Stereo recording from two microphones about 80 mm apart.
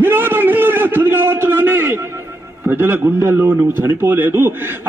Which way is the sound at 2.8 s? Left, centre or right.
Right.